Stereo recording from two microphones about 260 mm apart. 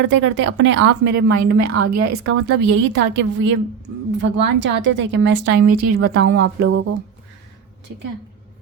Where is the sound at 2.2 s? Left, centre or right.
Right.